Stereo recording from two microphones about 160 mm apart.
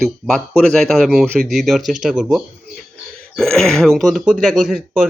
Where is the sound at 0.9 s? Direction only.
Centre (ahead or behind).